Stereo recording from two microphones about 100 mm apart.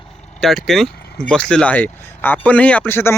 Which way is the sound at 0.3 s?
5° left (ahead or behind).